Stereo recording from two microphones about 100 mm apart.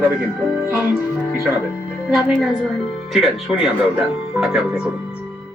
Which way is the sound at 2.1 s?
5° right (ahead or behind).